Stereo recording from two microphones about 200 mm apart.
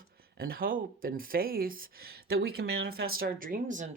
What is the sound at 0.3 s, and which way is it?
Speech, 50° right (ahead or behind).